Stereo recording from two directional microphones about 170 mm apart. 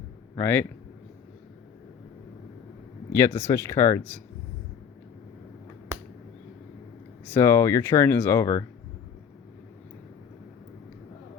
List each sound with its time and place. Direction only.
0.3 s speech: 15° left (ahead or behind)
3.1 s speech: 15° left (ahead or behind)
7.3 s speech: 15° left (ahead or behind)